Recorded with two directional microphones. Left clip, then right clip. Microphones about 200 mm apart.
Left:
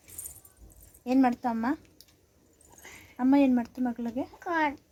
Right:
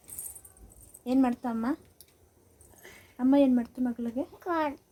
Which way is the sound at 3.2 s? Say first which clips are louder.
Even; 25° left (ahead or behind).